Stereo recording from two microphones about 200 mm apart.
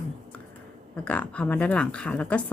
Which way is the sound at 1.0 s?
5° left (ahead or behind).